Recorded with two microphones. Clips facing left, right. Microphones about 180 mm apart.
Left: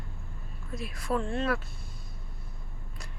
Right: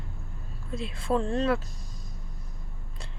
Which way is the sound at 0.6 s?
25° right (ahead or behind).